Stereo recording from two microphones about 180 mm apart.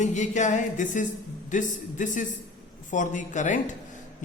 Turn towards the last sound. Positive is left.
turn(degrees=45)  # may be behind; listen again after turning